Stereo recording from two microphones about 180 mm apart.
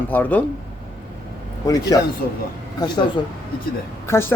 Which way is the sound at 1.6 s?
20° left (ahead or behind).